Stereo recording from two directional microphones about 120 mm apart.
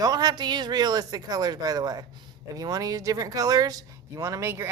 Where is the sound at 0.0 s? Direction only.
35° right (ahead or behind).